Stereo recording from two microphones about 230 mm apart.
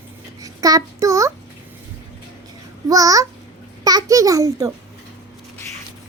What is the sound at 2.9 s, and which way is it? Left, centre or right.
A child's voice, centre.